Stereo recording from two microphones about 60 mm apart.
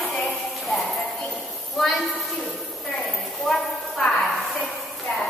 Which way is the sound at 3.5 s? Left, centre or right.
Centre.